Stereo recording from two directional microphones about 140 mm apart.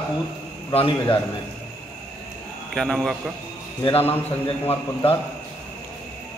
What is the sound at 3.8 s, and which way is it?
Speech, 45° left (ahead or behind).